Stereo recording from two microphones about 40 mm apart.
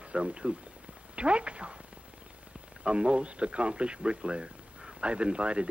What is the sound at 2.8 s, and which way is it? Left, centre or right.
Speech, right.